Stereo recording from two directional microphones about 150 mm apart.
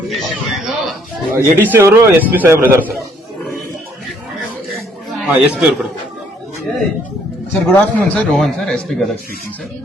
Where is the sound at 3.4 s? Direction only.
Centre (ahead or behind).